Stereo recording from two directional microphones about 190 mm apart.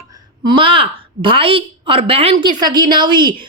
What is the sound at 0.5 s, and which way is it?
A woman's voice, 25° right (ahead or behind).